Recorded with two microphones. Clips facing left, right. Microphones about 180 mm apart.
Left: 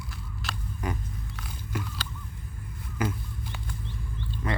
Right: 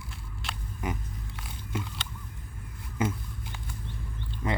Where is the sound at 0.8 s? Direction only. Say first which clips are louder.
Even; 20° right (ahead or behind).